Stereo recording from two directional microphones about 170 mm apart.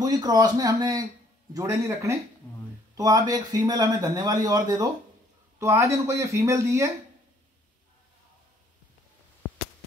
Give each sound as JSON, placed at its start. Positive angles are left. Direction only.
{"t": 0.0, "sound": "speech", "side_deg": -25}